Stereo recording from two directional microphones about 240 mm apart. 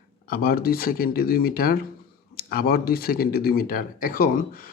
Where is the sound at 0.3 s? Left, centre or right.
Left.